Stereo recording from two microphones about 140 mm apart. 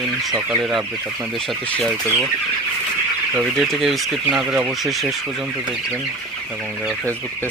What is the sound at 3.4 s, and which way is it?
Speech, centre (ahead or behind).